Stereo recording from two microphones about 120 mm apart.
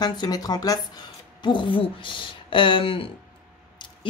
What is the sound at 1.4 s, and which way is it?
Speech, 45° left (ahead or behind).